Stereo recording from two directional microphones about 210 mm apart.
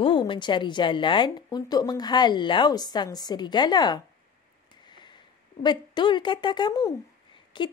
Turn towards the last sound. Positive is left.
turn(degrees=25)  # may be behind; listen again after turning